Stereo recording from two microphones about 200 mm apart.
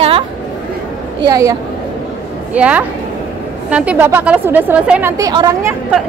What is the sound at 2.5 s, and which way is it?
A woman's voice, 5° right (ahead or behind).